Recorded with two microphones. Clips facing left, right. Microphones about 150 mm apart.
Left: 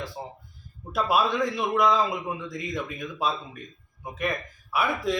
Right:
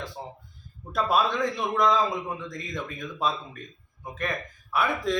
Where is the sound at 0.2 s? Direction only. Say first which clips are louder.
Left 1 dB; 10° left (ahead or behind).